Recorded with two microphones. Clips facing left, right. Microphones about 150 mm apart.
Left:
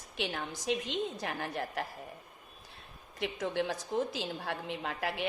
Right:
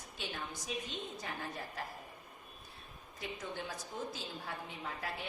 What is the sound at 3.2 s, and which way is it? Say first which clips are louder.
A woman's voice: left 9 dB; 85° left.